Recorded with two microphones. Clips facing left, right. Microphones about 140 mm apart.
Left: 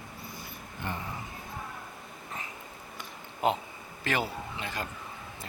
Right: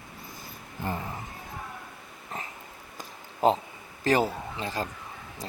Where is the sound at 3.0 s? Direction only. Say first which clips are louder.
Right 5 dB; 35° right (ahead or behind).